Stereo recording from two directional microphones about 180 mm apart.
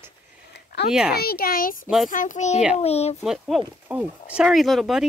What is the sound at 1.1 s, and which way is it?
A child's voice, 60° left (ahead or behind).